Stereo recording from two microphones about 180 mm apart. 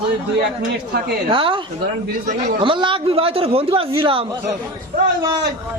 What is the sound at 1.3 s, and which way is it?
Speech, 30° right (ahead or behind).